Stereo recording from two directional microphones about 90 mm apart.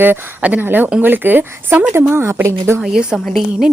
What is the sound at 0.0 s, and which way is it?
A woman's voice, 20° right (ahead or behind).